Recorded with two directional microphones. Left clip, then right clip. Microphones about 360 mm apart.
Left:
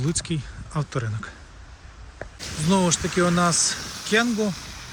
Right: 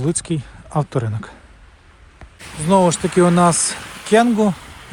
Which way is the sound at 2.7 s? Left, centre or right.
Centre.